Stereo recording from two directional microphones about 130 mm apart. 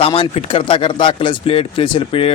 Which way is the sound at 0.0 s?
45° left (ahead or behind).